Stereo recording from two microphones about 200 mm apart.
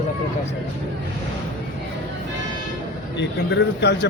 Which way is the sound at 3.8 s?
55° left (ahead or behind).